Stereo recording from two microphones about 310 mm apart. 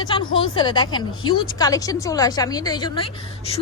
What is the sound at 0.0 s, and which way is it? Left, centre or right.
A woman's voice, centre.